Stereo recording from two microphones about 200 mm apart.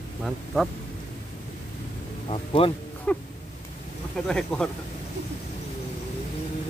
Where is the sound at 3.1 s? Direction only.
10° left (ahead or behind).